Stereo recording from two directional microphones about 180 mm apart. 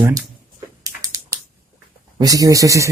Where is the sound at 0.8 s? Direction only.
20° right (ahead or behind).